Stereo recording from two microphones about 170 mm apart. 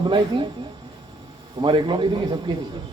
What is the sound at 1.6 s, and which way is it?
Speech, 30° right (ahead or behind).